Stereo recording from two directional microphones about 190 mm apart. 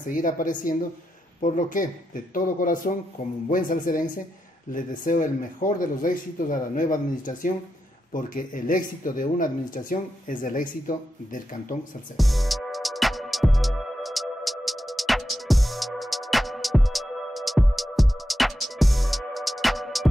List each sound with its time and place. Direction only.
0.0 s speech: 45° left (ahead or behind)
12.2 s music: centre (ahead or behind)